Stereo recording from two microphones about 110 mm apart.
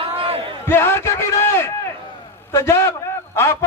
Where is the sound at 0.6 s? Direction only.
20° left (ahead or behind).